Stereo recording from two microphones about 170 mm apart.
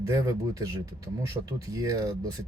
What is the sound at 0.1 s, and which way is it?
Speech, 20° right (ahead or behind).